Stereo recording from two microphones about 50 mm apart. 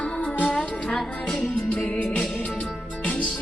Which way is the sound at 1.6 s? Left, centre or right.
Left.